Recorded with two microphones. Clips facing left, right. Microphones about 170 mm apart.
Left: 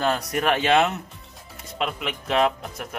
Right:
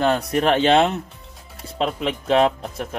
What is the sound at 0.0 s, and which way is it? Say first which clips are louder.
Speech: right 4 dB; 25° right (ahead or behind).